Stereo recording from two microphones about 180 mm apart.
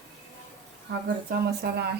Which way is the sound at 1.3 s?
65° right (ahead or behind).